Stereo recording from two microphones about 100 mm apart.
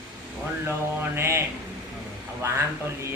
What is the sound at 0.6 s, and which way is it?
Speech, 25° right (ahead or behind).